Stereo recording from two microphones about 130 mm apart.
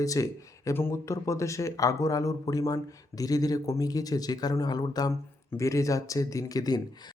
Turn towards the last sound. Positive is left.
turn(degrees=30)  # may be behind; listen again after turning